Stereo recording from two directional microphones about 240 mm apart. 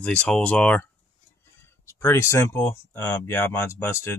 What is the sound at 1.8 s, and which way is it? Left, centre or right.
Speech, centre.